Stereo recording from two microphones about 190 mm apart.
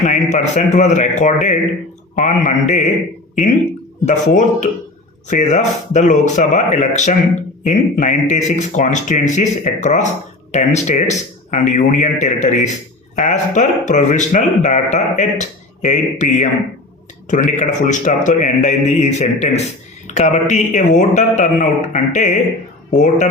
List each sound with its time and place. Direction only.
0.0 s speech: 40° left (ahead or behind)
4.0 s speech: 40° left (ahead or behind)